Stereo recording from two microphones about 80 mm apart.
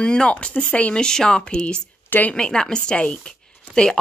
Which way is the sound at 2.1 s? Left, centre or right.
Left.